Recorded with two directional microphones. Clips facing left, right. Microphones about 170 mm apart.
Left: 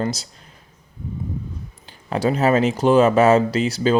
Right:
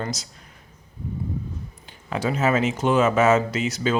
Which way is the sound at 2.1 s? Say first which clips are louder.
Left 4 dB; 35° left (ahead or behind).